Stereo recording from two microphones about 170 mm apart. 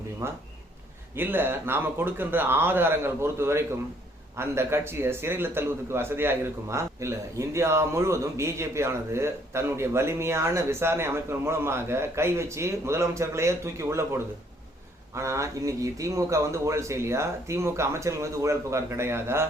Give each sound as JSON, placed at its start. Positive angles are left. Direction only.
{"t": 0.2, "sound": "a man's voice", "side_deg": -15}